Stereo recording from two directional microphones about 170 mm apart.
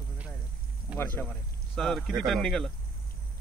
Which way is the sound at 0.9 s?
10° left (ahead or behind).